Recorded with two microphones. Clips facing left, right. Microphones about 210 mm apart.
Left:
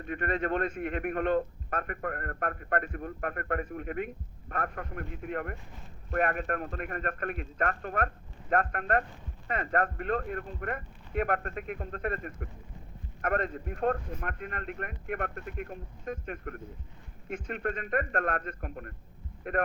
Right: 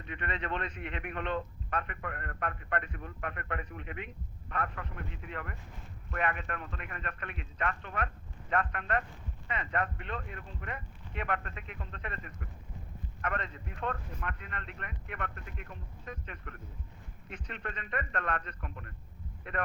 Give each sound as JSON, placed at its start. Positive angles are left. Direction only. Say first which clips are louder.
{"t": 0.0, "sound": "a man's voice", "louder": "left 7 dB", "side_deg": 45}